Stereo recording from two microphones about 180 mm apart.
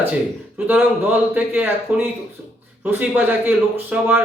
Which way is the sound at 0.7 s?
10° right (ahead or behind).